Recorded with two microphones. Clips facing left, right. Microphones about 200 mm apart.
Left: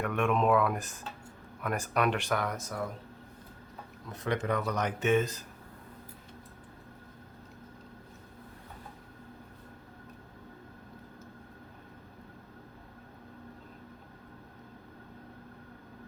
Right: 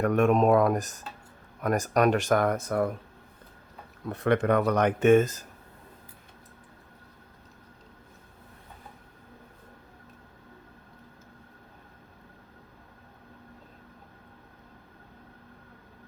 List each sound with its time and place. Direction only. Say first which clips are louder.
0.0 s speech: right 6 dB; 40° right (ahead or behind); by 2.9 s 60° right (ahead or behind)
4.0 s speech: right 8 dB; 60° right (ahead or behind)